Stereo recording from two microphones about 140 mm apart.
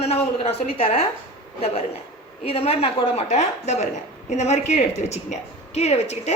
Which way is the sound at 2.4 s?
45° left (ahead or behind).